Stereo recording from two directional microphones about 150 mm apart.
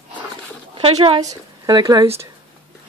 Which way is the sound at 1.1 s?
25° right (ahead or behind).